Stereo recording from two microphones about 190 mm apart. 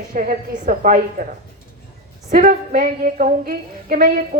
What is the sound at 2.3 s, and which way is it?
A woman's voice, 45° right (ahead or behind).